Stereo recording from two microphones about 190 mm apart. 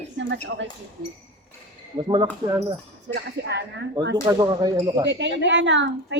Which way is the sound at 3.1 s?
60° right (ahead or behind).